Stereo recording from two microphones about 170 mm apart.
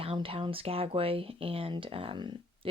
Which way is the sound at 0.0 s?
35° right (ahead or behind).